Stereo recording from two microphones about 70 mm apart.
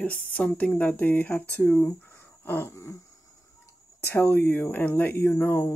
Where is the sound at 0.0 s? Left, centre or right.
Centre.